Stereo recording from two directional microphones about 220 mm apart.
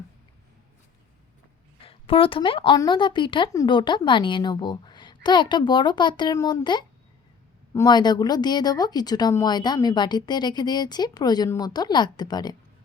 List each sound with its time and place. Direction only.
1.9 s a woman's voice: 25° left (ahead or behind)